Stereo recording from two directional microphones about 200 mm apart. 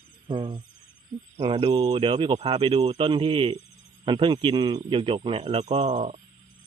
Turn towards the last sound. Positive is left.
turn(degrees=-30)  # may be behind; listen again after turning